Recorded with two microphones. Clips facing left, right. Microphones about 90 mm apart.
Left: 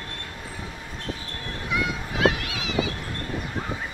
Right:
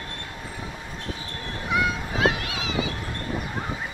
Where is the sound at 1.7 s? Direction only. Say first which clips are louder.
Right 3 dB; 25° right (ahead or behind).